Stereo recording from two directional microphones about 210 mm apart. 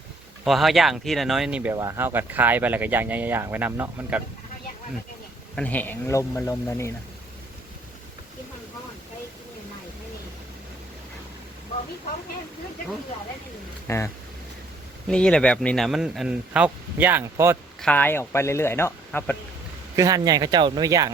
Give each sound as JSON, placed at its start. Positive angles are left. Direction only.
{"t": 0.4, "sound": "speech", "side_deg": 0}
{"t": 5.5, "sound": "speech", "side_deg": 5}
{"t": 13.8, "sound": "speech", "side_deg": 10}
{"t": 17.7, "sound": "speech", "side_deg": 5}
{"t": 20.0, "sound": "speech", "side_deg": -15}